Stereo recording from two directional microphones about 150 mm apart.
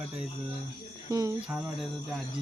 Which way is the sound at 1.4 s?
10° right (ahead or behind).